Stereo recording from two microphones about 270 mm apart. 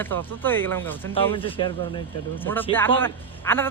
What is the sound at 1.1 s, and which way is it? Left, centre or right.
Speech, centre.